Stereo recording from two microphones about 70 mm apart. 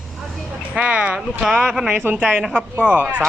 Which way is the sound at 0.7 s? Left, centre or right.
Centre.